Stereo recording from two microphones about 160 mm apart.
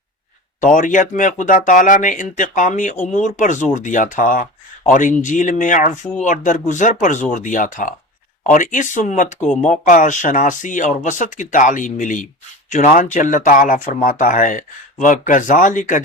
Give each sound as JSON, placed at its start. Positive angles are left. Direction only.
{"t": 0.6, "sound": "speech", "side_deg": 55}